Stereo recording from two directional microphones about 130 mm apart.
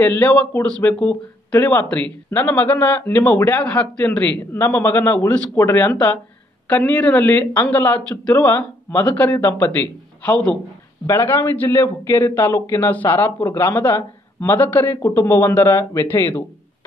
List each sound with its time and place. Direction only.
0.0 s a man's voice: 10° left (ahead or behind)